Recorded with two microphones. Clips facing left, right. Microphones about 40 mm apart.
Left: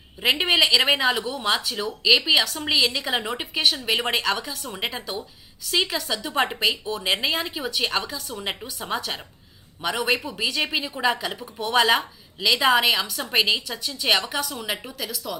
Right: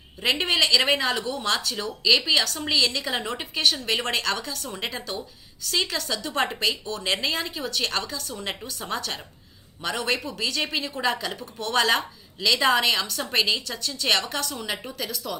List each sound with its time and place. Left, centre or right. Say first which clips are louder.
0.2 s speech: left 3 dB; centre